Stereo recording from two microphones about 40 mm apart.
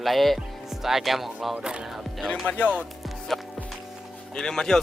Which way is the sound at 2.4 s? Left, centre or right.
Left.